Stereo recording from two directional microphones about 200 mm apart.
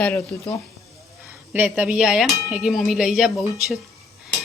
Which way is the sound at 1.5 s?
5° right (ahead or behind).